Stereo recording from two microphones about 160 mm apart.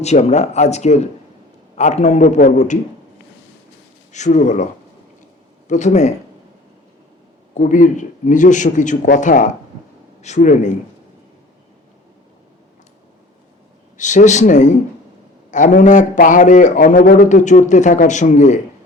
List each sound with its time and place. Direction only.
0.0 s a man's voice: 45° left (ahead or behind)
4.1 s a man's voice: 50° left (ahead or behind)
7.5 s a man's voice: 50° left (ahead or behind)
13.9 s a man's voice: 50° left (ahead or behind)